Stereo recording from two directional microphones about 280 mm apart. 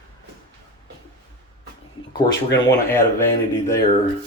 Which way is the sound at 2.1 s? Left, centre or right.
Centre.